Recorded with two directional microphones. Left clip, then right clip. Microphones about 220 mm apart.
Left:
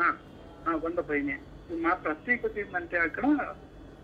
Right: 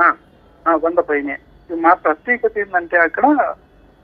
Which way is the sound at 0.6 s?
5° left (ahead or behind).